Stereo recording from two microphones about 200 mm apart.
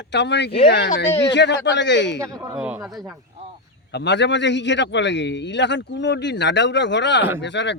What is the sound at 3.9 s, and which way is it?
A man's voice, 60° left (ahead or behind).